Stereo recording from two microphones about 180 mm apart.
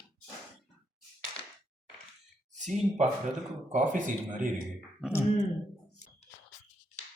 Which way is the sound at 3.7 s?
45° right (ahead or behind).